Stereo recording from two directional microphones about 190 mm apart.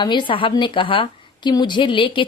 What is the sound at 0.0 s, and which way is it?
Speech, 25° left (ahead or behind).